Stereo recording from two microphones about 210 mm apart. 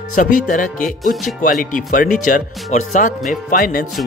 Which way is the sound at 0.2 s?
35° left (ahead or behind).